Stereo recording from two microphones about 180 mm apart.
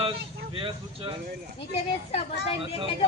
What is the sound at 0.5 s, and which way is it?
Speech, 30° right (ahead or behind).